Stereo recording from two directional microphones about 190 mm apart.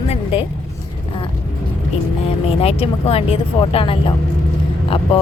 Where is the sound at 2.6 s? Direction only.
30° left (ahead or behind).